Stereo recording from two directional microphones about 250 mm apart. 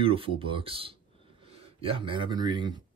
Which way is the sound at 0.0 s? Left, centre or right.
Right.